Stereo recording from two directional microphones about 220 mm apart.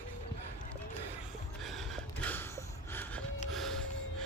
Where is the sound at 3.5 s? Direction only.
Centre (ahead or behind).